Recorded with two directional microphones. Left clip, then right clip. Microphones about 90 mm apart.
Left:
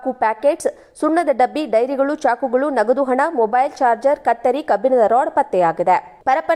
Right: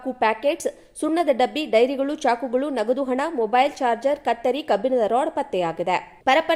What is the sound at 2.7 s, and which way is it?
A woman's voice, 5° left (ahead or behind).